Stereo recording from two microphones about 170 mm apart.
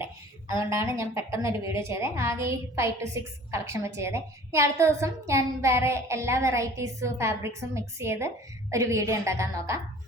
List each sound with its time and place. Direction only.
0.7 s a woman's voice: 15° right (ahead or behind)